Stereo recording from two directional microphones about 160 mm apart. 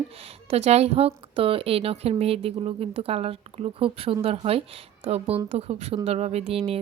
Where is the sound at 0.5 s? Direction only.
40° right (ahead or behind).